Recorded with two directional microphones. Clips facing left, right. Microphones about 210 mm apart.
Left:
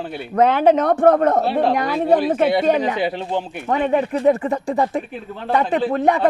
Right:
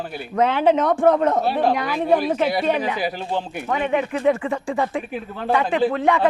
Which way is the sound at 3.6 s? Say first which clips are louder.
Left 4 dB; 40° left (ahead or behind).